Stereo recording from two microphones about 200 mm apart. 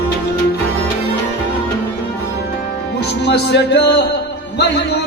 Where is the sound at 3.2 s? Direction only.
55° left (ahead or behind).